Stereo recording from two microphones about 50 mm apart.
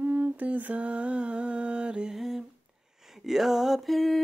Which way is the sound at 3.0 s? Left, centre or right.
Centre.